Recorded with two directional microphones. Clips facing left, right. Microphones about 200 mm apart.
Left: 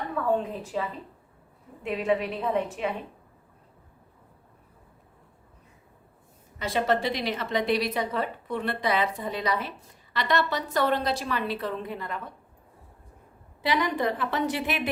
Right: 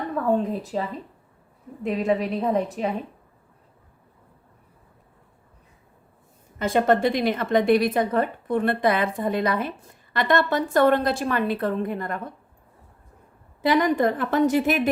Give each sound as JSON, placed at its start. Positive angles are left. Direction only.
{"t": 0.6, "sound": "a woman's voice", "side_deg": -40}
{"t": 6.6, "sound": "a woman's voice", "side_deg": -50}
{"t": 13.6, "sound": "a woman's voice", "side_deg": -50}